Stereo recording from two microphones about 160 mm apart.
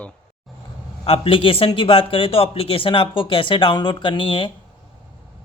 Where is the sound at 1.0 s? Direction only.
35° left (ahead or behind).